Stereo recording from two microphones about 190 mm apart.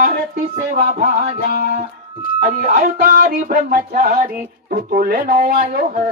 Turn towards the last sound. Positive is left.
turn(degrees=-45)  # may be behind; listen again after turning